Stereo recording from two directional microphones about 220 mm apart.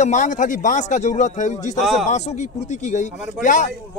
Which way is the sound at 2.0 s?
30° left (ahead or behind).